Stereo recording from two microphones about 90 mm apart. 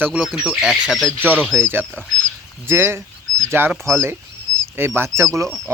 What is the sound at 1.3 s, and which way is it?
Speech, 15° left (ahead or behind).